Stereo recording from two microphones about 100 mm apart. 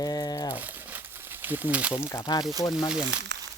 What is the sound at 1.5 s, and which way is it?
Speech, 15° right (ahead or behind).